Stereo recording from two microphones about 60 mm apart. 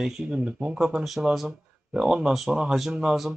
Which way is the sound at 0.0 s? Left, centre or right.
Centre.